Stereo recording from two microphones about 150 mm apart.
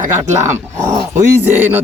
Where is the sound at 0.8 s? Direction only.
20° right (ahead or behind).